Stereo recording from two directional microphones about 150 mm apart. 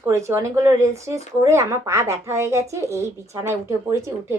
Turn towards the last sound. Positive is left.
turn(degrees=-20)  # may be behind; listen again after turning